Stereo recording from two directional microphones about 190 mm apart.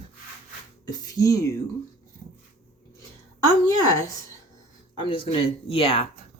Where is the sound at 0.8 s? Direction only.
20° left (ahead or behind).